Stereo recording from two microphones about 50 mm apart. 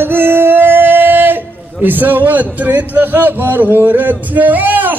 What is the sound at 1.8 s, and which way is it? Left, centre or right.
A man's voice, right.